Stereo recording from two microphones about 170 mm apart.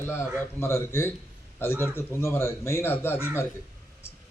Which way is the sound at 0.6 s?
15° left (ahead or behind).